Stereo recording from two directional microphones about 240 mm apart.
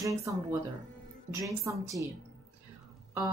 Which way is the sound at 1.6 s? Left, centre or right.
Centre.